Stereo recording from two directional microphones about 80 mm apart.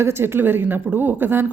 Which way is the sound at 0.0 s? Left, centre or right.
Right.